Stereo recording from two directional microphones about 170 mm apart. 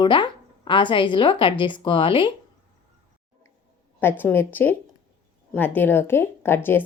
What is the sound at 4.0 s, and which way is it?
Speech, 10° left (ahead or behind).